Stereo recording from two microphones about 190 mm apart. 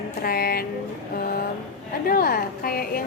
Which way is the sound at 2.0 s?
50° left (ahead or behind).